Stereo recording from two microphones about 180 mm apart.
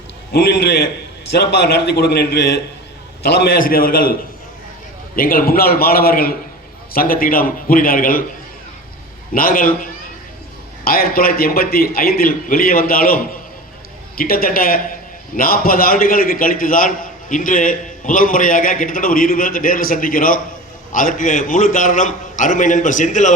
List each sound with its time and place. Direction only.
0.3 s a man's voice: 65° left (ahead or behind)
5.1 s a man's voice: 55° left (ahead or behind)
9.3 s a man's voice: 50° left (ahead or behind)